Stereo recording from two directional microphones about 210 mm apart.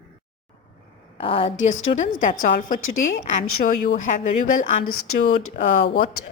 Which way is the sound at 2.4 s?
40° left (ahead or behind).